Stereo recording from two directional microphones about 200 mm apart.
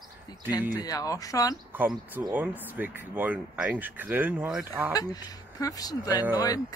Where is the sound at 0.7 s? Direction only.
20° left (ahead or behind).